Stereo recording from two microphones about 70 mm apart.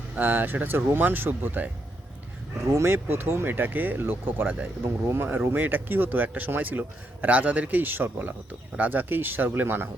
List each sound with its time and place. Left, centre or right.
0.2 s speech: right
2.7 s speech: right